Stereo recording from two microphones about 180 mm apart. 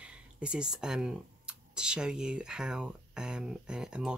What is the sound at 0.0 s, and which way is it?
Speech, 5° right (ahead or behind).